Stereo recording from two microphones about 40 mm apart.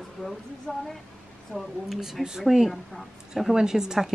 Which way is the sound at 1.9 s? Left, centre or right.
Centre.